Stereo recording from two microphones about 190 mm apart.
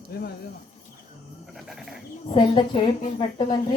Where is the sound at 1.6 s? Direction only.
Centre (ahead or behind).